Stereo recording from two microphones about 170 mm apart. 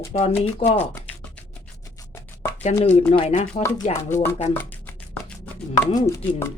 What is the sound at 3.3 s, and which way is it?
Speech, 45° left (ahead or behind).